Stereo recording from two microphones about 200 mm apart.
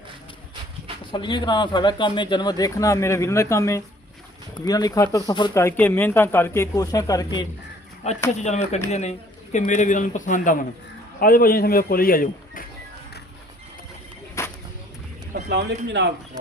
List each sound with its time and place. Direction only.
1.1 s speech: 20° left (ahead or behind)
8.4 s a man's voice: 35° left (ahead or behind)
14.4 s a sound: 15° left (ahead or behind)
15.4 s speech: 60° right (ahead or behind)